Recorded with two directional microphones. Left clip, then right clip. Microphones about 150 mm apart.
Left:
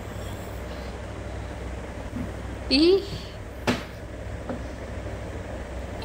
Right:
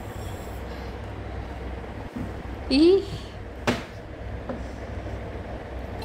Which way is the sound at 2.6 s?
20° right (ahead or behind).